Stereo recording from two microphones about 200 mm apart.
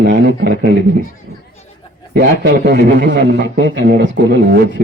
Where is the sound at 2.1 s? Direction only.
55° right (ahead or behind).